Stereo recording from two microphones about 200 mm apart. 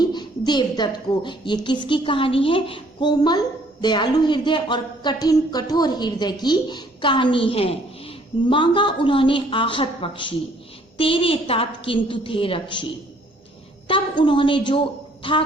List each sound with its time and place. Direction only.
0.0 s a woman's voice: 20° left (ahead or behind)